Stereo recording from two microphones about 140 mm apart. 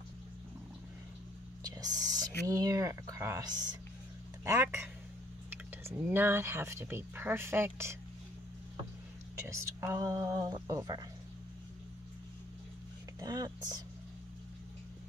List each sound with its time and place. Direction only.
1.6 s speech: 25° right (ahead or behind)
4.5 s speech: 20° right (ahead or behind)
5.9 s speech: 15° right (ahead or behind)
9.5 s speech: 20° right (ahead or behind)
13.2 s speech: 25° right (ahead or behind)